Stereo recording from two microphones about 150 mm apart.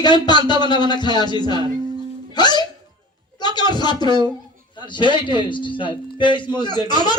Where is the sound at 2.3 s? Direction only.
30° left (ahead or behind).